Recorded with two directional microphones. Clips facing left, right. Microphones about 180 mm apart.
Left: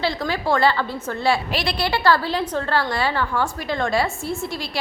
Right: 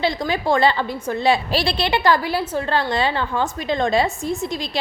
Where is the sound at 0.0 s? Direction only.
15° right (ahead or behind).